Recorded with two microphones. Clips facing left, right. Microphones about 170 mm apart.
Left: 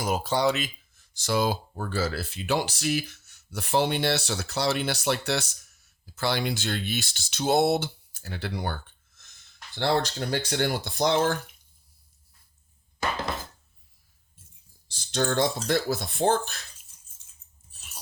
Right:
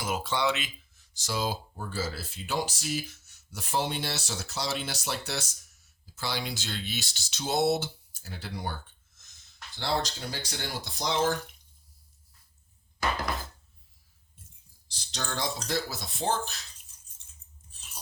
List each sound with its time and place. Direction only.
0.0 s speech: 40° left (ahead or behind)
1.1 s speech: 60° left (ahead or behind)
14.8 s a sound: 50° left (ahead or behind)
15.6 s speech: 55° left (ahead or behind)